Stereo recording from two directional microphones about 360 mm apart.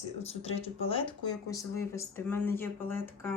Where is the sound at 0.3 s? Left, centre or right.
Centre.